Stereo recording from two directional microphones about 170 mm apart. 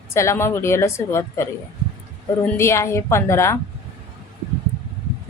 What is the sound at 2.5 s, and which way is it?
A woman's voice, 15° left (ahead or behind).